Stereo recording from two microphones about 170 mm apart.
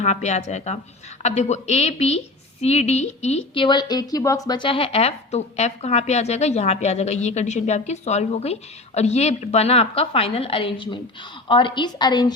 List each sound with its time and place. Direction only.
0.0 s a woman's voice: 40° left (ahead or behind); by 12.3 s 25° left (ahead or behind)